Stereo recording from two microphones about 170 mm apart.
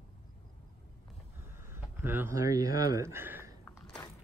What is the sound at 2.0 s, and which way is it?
Speech, 15° right (ahead or behind).